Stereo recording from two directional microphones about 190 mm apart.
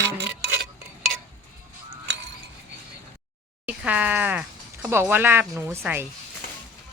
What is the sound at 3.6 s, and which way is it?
Groan, 5° right (ahead or behind).